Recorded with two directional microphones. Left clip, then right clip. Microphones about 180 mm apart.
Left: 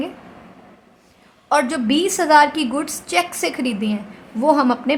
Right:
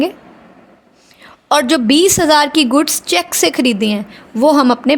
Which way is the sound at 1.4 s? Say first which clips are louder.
Right 6 dB; 50° right (ahead or behind).